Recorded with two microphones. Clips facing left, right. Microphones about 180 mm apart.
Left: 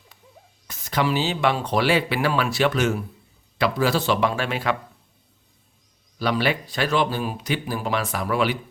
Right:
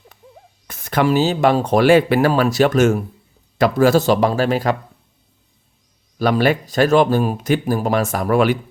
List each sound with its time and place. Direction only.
0.7 s speech: 55° right (ahead or behind); by 4.8 s 40° right (ahead or behind)
6.1 s speech: 45° right (ahead or behind)